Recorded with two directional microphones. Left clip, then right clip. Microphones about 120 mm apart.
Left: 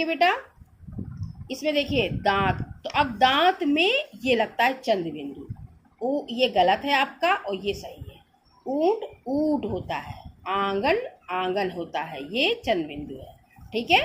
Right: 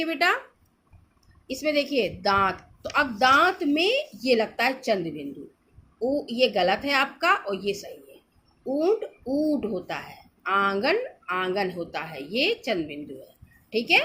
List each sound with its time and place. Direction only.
1.6 s speech: 40° right (ahead or behind)